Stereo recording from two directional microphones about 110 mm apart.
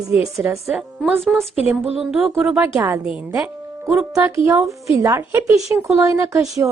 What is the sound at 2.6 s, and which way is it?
Speech, 25° right (ahead or behind).